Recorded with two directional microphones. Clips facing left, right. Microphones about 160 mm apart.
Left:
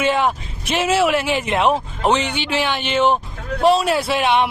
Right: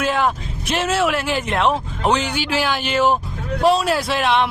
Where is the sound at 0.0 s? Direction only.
Centre (ahead or behind).